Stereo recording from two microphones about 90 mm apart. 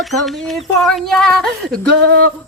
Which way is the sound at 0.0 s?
Centre (ahead or behind).